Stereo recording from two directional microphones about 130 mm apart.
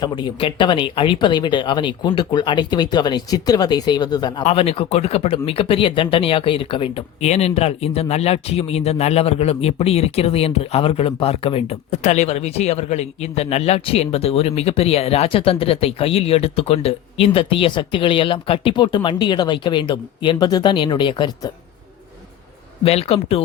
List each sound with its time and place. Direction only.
0.0 s speech: 35° left (ahead or behind)
4.4 s speech: 50° left (ahead or behind)
22.8 s speech: 50° left (ahead or behind)